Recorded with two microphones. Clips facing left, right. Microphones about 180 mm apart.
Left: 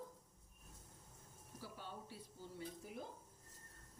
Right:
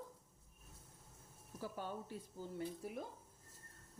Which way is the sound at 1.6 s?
50° right (ahead or behind).